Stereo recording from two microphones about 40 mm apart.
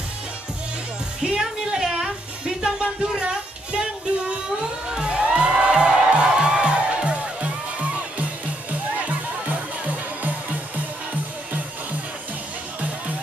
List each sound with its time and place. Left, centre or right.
1.2 s a sound: centre
2.6 s music: right
4.8 s music: right